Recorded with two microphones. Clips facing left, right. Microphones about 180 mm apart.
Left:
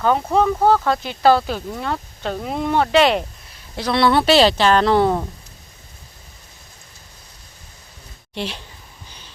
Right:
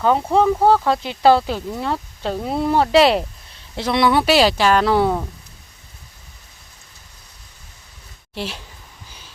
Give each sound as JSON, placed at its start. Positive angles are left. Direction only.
{"t": 0.0, "sound": "speech", "side_deg": -5}
{"t": 1.0, "sound": "speech", "side_deg": -25}
{"t": 1.7, "sound": "speech", "side_deg": -5}
{"t": 3.8, "sound": "speech", "side_deg": -20}
{"t": 8.4, "sound": "speech", "side_deg": -5}
{"t": 9.0, "sound": "a sound", "side_deg": -5}